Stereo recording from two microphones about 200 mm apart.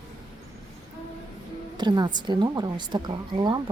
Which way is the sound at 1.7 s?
20° right (ahead or behind).